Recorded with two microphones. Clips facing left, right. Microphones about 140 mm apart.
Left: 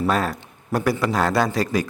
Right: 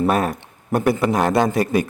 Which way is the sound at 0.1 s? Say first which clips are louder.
Right 3 dB; 20° right (ahead or behind).